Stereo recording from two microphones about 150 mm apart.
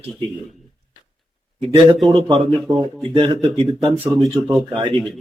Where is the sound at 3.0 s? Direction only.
35° right (ahead or behind).